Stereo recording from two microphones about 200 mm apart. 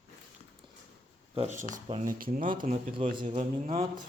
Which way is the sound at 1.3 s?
35° right (ahead or behind).